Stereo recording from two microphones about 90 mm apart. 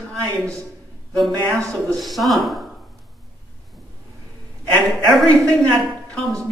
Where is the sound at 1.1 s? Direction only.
60° right (ahead or behind).